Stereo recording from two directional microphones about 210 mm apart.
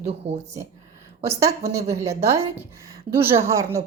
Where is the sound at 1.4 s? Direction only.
15° right (ahead or behind).